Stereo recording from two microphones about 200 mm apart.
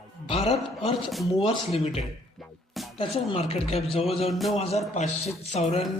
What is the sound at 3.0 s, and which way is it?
Speech, 25° left (ahead or behind).